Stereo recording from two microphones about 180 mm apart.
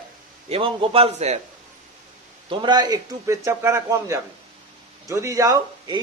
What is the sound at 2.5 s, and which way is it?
A man's voice, 25° right (ahead or behind).